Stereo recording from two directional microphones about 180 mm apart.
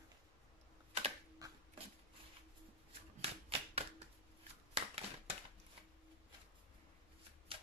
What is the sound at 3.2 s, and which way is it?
Typewriter, 35° right (ahead or behind).